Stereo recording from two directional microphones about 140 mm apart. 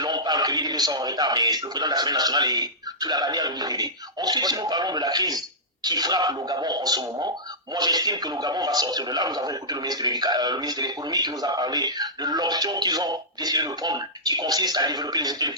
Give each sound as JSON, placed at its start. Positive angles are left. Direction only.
{"t": 0.0, "sound": "a man's voice", "side_deg": -30}